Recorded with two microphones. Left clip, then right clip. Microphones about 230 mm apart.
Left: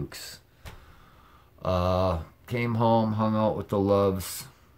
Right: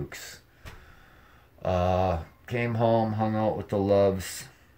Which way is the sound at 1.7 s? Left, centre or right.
Centre.